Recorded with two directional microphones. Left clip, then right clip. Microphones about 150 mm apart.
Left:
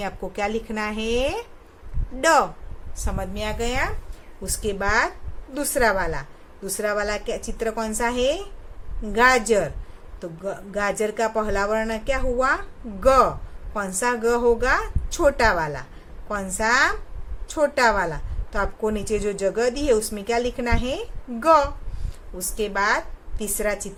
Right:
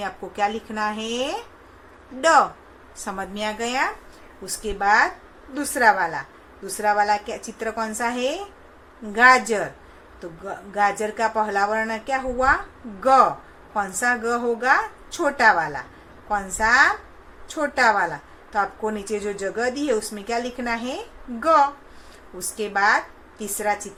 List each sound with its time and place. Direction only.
0.0 s a woman's voice: 25° left (ahead or behind)
4.4 s a woman's voice: 35° left (ahead or behind)